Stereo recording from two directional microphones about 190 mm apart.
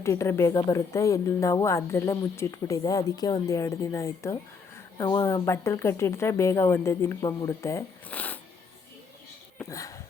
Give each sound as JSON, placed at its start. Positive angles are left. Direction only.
{"t": 0.0, "sound": "a woman's voice", "side_deg": 15}
{"t": 9.6, "sound": "speech", "side_deg": 15}